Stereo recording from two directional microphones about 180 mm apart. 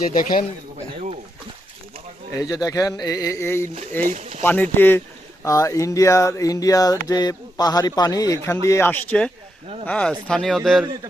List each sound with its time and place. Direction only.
0.0 s speech: 50° left (ahead or behind)
2.3 s speech: 20° left (ahead or behind)
4.0 s speech: 40° right (ahead or behind)
4.4 s speech: 10° left (ahead or behind)